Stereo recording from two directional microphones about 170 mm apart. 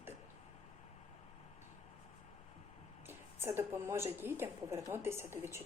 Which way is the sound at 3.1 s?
15° right (ahead or behind).